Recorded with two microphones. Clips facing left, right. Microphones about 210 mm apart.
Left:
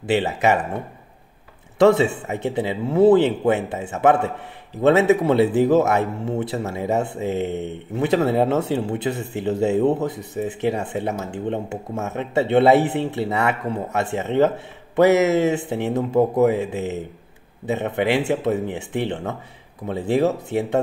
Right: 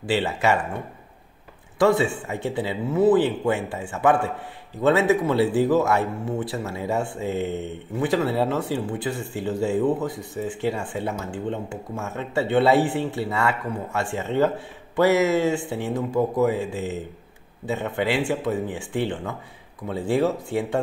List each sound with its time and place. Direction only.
0.0 s speech: 20° left (ahead or behind)
1.8 s speech: 20° left (ahead or behind)